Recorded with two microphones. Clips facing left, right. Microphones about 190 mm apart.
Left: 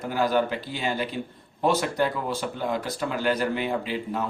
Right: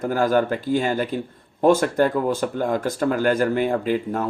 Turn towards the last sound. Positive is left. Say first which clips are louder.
# right 6 dB
turn(degrees=-45)  # may be behind; listen again after turning